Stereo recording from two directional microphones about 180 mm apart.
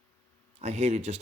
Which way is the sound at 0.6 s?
35° right (ahead or behind).